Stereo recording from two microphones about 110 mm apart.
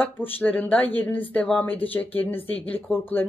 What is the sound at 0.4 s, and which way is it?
Speech, 15° left (ahead or behind).